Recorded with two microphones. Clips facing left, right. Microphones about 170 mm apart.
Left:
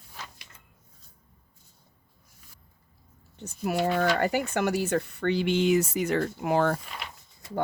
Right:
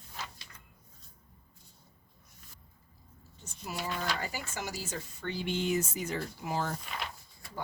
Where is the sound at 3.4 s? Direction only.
65° left (ahead or behind).